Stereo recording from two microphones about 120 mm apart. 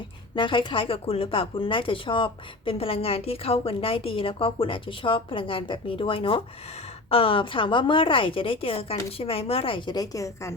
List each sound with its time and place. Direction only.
0.3 s speech: 40° left (ahead or behind)